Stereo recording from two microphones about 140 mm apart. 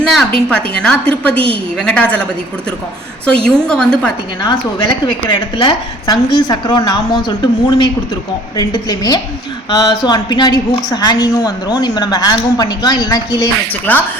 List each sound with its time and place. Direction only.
0.0 s a woman's voice: 5° left (ahead or behind)
3.2 s a woman's voice: 5° left (ahead or behind)
5.3 s a woman's voice: 35° left (ahead or behind)
13.9 s a woman's voice: 10° left (ahead or behind)